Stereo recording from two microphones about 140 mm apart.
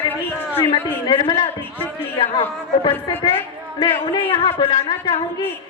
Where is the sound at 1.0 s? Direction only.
35° left (ahead or behind).